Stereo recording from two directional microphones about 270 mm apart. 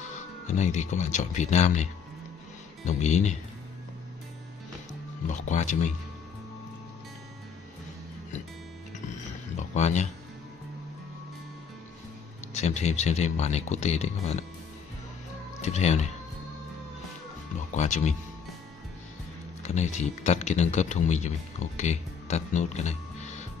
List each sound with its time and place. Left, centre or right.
0.1 s speech: left
5.3 s speech: left
9.6 s a sound: left
12.5 s speech: left
15.6 s speech: left
17.7 s speech: left
19.6 s speech: left